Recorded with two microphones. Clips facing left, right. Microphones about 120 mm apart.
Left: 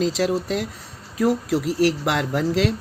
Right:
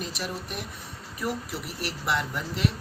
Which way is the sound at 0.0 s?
90° left.